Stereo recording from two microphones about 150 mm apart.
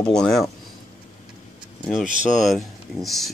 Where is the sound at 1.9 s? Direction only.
Centre (ahead or behind).